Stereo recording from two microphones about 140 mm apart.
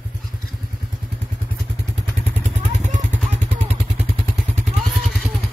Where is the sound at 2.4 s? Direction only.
60° right (ahead or behind).